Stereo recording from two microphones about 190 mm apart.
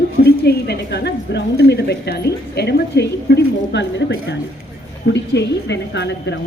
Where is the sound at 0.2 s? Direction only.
55° left (ahead or behind).